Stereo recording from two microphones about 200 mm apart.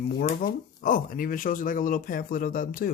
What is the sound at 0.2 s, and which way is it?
Speech, 45° left (ahead or behind).